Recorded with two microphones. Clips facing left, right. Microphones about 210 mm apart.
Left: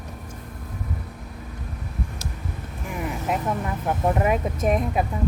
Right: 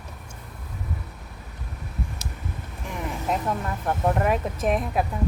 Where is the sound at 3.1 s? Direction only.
5° left (ahead or behind).